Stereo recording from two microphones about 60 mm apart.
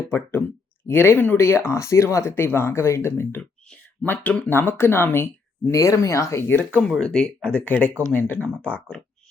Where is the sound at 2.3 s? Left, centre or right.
Left.